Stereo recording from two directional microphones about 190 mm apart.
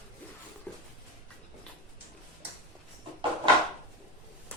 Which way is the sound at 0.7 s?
5° left (ahead or behind).